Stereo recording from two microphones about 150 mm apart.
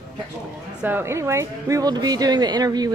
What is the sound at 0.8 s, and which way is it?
A woman's voice, 15° right (ahead or behind).